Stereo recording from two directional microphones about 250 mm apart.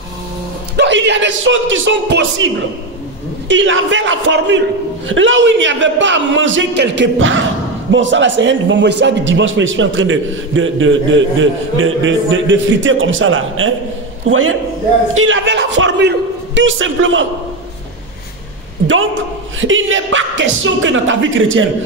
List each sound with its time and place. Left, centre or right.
0.7 s a man's voice: right
19.6 s a man's voice: right